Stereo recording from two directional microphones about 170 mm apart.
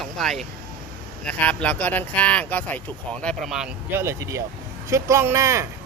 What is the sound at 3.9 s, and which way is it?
Speech, 15° right (ahead or behind).